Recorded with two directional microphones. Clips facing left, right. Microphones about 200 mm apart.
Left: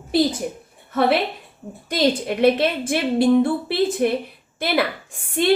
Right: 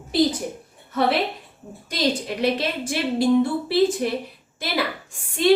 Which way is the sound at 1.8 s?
55° left (ahead or behind).